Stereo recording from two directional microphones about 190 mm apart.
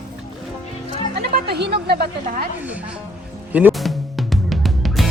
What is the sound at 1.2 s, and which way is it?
A woman's voice, 60° right (ahead or behind).